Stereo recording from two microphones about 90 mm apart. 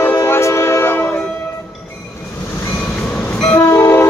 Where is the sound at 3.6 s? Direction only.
30° left (ahead or behind).